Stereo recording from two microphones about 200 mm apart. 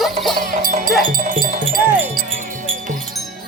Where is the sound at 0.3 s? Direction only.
45° right (ahead or behind).